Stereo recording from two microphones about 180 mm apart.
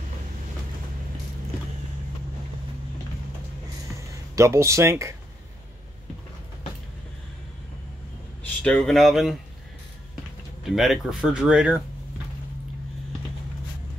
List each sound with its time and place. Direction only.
3.9 s a sound: 15° right (ahead or behind)
8.6 s speech: 5° left (ahead or behind)
10.6 s speech: centre (ahead or behind)